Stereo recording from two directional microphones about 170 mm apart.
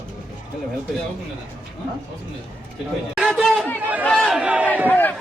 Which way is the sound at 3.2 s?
Centre (ahead or behind).